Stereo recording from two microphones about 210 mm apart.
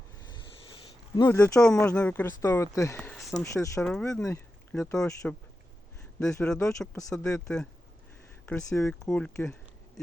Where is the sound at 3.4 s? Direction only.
15° left (ahead or behind).